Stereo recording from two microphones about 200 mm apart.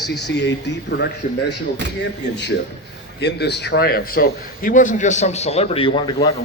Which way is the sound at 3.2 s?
55° left (ahead or behind).